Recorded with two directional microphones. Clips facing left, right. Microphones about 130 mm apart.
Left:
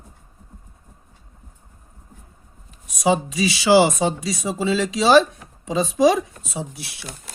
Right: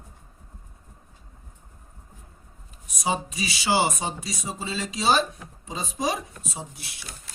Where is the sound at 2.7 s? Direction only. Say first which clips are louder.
Left 8 dB; 90° left.